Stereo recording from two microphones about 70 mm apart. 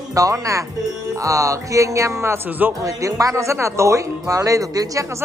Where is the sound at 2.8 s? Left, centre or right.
Right.